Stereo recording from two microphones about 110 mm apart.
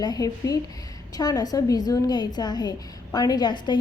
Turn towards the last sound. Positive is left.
turn(degrees=40)  # may be behind; listen again after turning